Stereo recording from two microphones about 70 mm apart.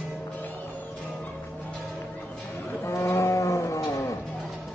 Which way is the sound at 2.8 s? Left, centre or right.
Left.